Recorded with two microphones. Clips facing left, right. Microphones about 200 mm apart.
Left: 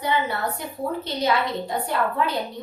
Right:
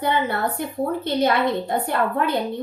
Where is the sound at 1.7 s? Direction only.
55° right (ahead or behind).